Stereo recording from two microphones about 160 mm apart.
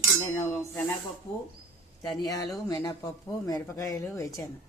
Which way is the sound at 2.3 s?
20° left (ahead or behind).